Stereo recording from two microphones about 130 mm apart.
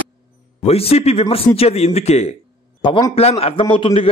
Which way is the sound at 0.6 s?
50° left (ahead or behind).